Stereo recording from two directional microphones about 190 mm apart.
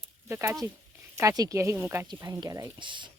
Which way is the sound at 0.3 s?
15° right (ahead or behind).